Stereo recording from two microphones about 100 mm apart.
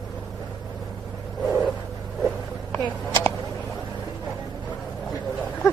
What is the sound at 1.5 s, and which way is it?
Vehicle, centre (ahead or behind).